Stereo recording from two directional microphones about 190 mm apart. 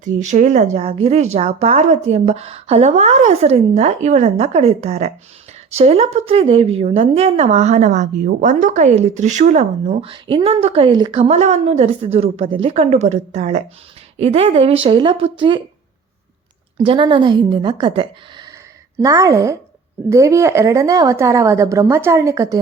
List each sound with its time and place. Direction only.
0.0 s a woman's voice: 40° right (ahead or behind)
16.7 s a woman's voice: 25° right (ahead or behind)